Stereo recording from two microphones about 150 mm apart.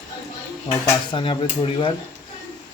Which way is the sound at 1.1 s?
35° left (ahead or behind).